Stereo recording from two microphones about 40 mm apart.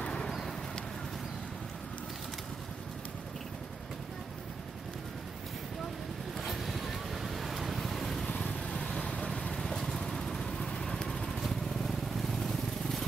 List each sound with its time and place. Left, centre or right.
0.0 s a sound: left
6.3 s waves: centre
8.5 s vehicle: left
8.7 s vehicle: left
11.4 s vehicle: centre